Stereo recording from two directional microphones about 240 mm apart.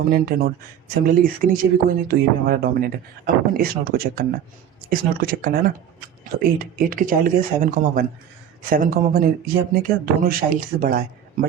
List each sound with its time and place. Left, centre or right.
0.1 s speech: right